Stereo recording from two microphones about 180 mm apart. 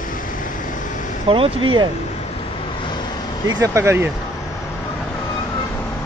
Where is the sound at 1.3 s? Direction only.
30° right (ahead or behind).